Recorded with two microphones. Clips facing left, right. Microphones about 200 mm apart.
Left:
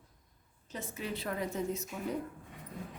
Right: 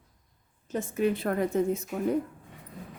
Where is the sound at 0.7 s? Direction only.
50° right (ahead or behind).